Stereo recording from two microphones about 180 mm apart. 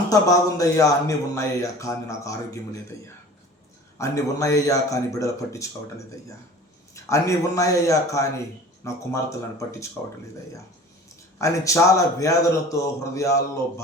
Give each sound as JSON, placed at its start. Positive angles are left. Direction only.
{"t": 0.1, "sound": "a man's voice", "side_deg": 20}
{"t": 3.9, "sound": "a man's voice", "side_deg": 15}
{"t": 6.9, "sound": "a man's voice", "side_deg": 15}
{"t": 11.3, "sound": "a man's voice", "side_deg": 15}